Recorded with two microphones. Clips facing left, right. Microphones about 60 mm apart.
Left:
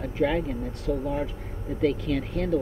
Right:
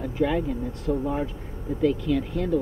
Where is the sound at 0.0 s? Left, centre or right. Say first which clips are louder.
Right 1 dB; left.